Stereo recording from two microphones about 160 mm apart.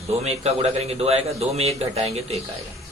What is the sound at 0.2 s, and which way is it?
A man's voice, 40° right (ahead or behind).